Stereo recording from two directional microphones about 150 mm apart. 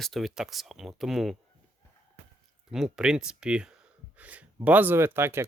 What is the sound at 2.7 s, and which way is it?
Speech, 5° right (ahead or behind).